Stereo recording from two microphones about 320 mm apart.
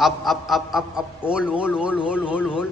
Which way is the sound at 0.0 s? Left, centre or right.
Centre.